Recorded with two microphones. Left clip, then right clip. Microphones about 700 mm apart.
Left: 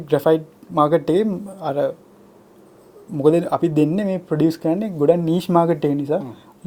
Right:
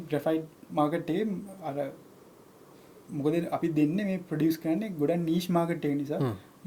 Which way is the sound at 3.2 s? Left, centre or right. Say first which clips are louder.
Left 12 dB; left.